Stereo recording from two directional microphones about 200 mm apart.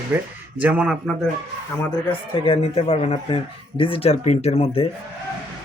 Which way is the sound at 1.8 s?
10° left (ahead or behind).